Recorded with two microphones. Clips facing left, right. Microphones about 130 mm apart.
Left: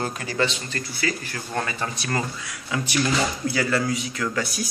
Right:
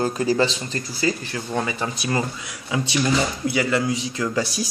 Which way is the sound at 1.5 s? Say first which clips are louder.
Right 2 dB; 15° right (ahead or behind).